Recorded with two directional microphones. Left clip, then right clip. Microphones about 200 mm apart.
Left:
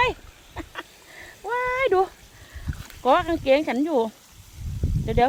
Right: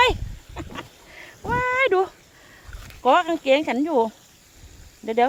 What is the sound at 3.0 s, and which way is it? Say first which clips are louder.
Speech: right 2 dB; 5° right (ahead or behind).